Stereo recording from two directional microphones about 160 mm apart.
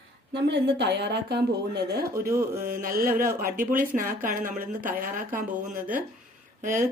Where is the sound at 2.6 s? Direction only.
60° right (ahead or behind).